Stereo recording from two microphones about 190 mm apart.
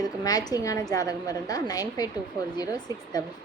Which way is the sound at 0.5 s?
20° left (ahead or behind).